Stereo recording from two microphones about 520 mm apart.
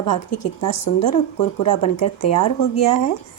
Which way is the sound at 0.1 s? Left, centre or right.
Left.